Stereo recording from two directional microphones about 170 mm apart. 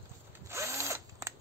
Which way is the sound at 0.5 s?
15° right (ahead or behind).